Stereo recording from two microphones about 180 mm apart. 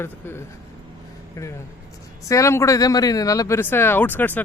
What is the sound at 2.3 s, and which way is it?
Speech, 15° left (ahead or behind).